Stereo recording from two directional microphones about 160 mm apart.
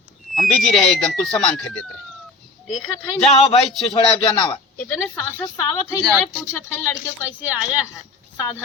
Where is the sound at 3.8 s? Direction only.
35° left (ahead or behind).